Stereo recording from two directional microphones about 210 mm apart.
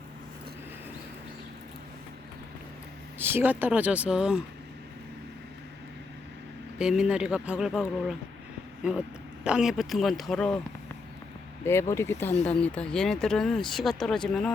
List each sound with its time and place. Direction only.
3.2 s speech: 10° right (ahead or behind)
6.7 s speech: 5° right (ahead or behind)
9.4 s speech: 5° right (ahead or behind)
11.6 s speech: 10° left (ahead or behind)